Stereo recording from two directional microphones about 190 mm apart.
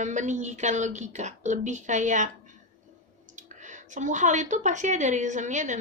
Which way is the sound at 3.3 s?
40° right (ahead or behind).